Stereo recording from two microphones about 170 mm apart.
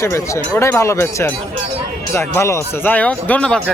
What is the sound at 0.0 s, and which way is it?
Speech, 15° left (ahead or behind).